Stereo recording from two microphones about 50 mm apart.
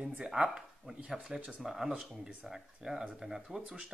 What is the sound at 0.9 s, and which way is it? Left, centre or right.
Speech, right.